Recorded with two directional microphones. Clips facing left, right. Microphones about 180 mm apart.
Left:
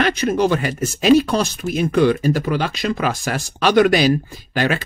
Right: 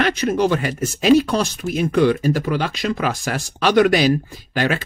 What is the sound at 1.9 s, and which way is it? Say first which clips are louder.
Speech: left 1 dB; 40° left (ahead or behind).